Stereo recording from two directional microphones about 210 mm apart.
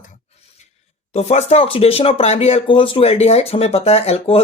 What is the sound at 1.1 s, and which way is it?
Speech, 30° left (ahead or behind).